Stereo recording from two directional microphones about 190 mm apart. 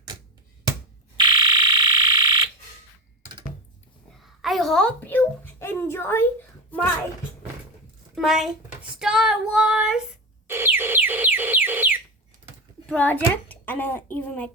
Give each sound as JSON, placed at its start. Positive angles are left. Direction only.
{"t": 1.1, "sound": "fire alarm", "side_deg": -25}
{"t": 4.2, "sound": "a sound", "side_deg": 0}
{"t": 8.1, "sound": "child singing", "side_deg": 0}
{"t": 10.4, "sound": "music", "side_deg": -10}
{"t": 12.9, "sound": "speech", "side_deg": 10}